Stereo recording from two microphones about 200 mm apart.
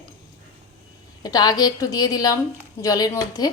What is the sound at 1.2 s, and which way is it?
A woman's voice, 20° left (ahead or behind).